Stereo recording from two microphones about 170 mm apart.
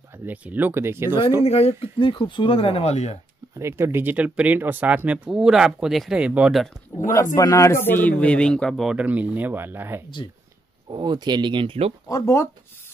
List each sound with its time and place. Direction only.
0.2 s speech: 10° right (ahead or behind)
1.4 s speech: 35° left (ahead or behind)
3.5 s speech: 15° right (ahead or behind)
7.3 s a man's voice: 20° left (ahead or behind); by 10.0 s 15° right (ahead or behind)
10.9 s speech: 25° right (ahead or behind)
12.1 s speech: 15° left (ahead or behind)